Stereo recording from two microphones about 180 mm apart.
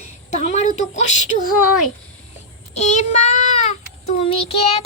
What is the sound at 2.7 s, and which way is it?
Speech, 40° left (ahead or behind).